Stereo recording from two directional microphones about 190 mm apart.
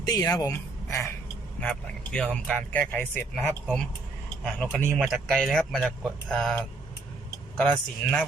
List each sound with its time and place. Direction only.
0.1 s speech: 20° left (ahead or behind)